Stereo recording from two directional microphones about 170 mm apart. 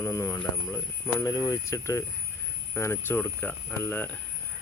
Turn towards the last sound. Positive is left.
turn(degrees=10)  # may be behind; listen again after turning